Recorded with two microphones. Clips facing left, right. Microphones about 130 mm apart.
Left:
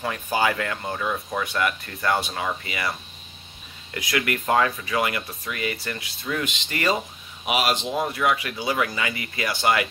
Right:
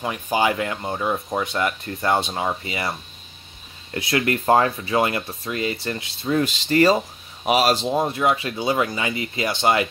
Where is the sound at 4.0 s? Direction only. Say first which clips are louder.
Right 4 dB; 30° right (ahead or behind).